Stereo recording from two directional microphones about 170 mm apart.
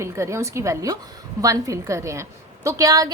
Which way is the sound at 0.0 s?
15° right (ahead or behind).